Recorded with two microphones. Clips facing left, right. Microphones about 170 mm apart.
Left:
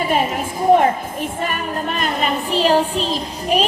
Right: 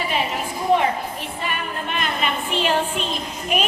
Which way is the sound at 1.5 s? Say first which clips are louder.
Left 4 dB; 40° left (ahead or behind).